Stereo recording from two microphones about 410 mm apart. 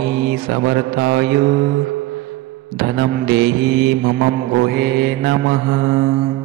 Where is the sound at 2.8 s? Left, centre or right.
Right.